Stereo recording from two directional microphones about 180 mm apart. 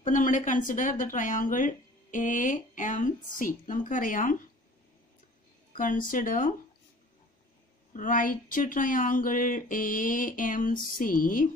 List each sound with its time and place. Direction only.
0.0 s speech: 45° left (ahead or behind)
5.8 s speech: 50° left (ahead or behind)
7.9 s speech: 50° left (ahead or behind)